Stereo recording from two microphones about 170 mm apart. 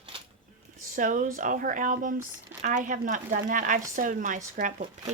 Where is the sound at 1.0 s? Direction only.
50° right (ahead or behind).